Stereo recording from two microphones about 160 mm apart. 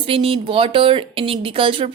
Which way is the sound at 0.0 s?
35° right (ahead or behind).